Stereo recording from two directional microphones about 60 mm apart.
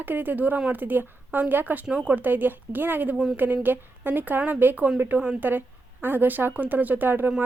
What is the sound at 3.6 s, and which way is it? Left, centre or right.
A woman's voice, right.